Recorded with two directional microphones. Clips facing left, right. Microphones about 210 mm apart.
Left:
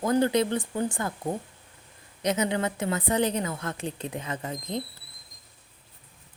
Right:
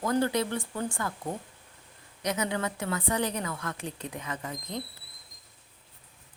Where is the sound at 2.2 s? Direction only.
25° left (ahead or behind).